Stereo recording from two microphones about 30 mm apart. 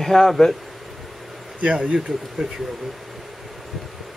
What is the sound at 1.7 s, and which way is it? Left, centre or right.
Speech, right.